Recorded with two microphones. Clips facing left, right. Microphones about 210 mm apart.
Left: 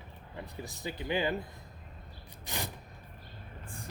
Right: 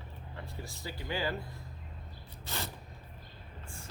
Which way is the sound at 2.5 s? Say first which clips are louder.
Left 1 dB; 15° left (ahead or behind).